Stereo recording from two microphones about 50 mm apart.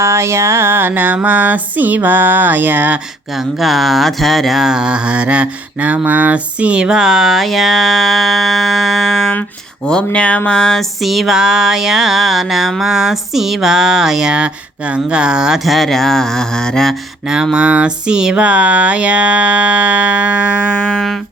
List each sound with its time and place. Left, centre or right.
0.0 s a sound: right
3.3 s mantra: centre
9.8 s mantra: centre
10.6 s mantra: centre
12.8 s speech: centre
15.5 s mantra: centre
17.2 s speech: centre
17.7 s mantra: right
18.3 s mantra: right
20.9 s mantra: centre